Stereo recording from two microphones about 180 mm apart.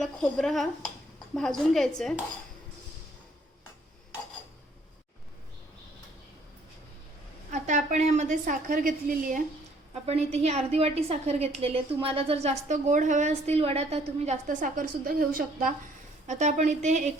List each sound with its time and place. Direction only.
0.0 s speech: 5° left (ahead or behind)
7.5 s a woman's voice: 40° right (ahead or behind)
9.9 s a woman's voice: 35° right (ahead or behind)
14.4 s a woman's voice: 50° right (ahead or behind)